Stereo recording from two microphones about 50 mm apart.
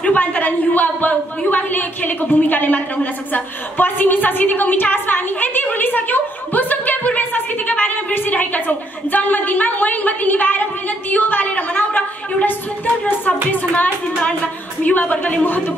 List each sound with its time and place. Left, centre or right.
0.0 s a sound: left
13.5 s speech: left
14.0 s a woman's voice: left